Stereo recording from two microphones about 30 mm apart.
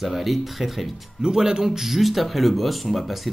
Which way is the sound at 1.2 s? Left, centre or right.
Right.